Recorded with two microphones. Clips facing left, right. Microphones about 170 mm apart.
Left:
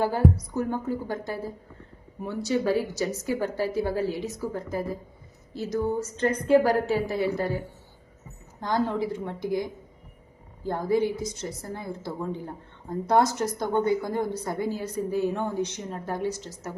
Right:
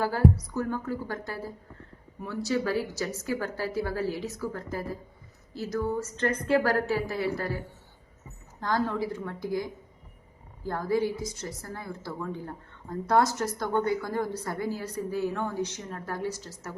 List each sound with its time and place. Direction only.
0.0 s a woman's voice: 20° left (ahead or behind)
8.6 s a woman's voice: 20° left (ahead or behind)